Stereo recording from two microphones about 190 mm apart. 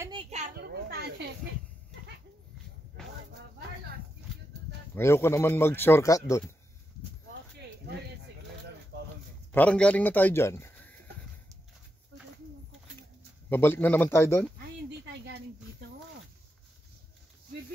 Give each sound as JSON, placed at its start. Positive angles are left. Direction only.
{"t": 0.1, "sound": "children playing", "side_deg": -25}
{"t": 0.6, "sound": "children playing", "side_deg": -60}
{"t": 4.9, "sound": "speech", "side_deg": 15}
{"t": 8.9, "sound": "a sound", "side_deg": -65}
{"t": 9.5, "sound": "speech", "side_deg": 10}
{"t": 13.5, "sound": "speech", "side_deg": 10}
{"t": 15.1, "sound": "a sound", "side_deg": -65}